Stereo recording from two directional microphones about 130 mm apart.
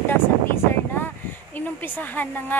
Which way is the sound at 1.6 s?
15° left (ahead or behind).